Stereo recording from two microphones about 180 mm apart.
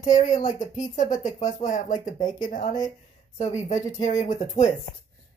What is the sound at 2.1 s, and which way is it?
Speech, 25° left (ahead or behind).